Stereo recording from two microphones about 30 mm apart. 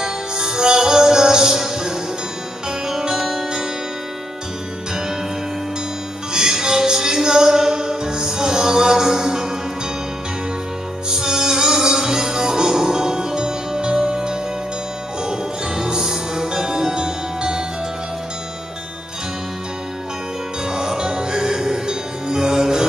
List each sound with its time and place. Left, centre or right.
0.0 s music: right
6.3 s music: right
11.1 s music: right
20.6 s music: right